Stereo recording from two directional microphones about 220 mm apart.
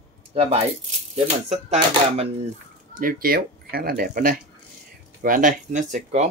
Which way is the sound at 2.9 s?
40° right (ahead or behind).